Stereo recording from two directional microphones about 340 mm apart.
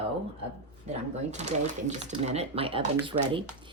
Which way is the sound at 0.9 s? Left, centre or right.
Centre.